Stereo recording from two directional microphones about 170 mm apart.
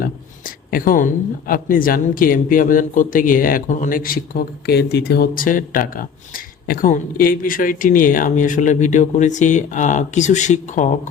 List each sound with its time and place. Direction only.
0.0 s speech: 55° left (ahead or behind)
4.6 s speech: 75° left (ahead or behind); by 11.1 s 45° left (ahead or behind)